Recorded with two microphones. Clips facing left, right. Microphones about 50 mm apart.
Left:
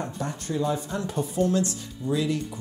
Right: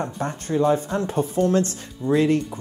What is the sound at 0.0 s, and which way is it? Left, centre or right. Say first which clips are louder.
Speech: right 4 dB; right.